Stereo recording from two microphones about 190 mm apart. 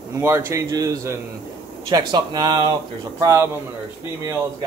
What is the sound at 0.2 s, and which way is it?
A man's voice, 10° right (ahead or behind).